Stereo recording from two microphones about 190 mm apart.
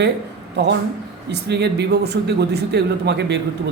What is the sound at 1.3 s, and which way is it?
Speech, 60° right (ahead or behind).